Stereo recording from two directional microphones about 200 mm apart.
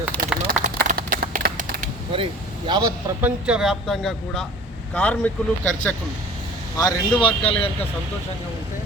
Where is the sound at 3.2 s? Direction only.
5° right (ahead or behind).